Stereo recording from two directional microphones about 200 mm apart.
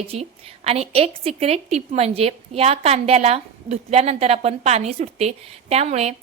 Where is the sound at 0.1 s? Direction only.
30° right (ahead or behind).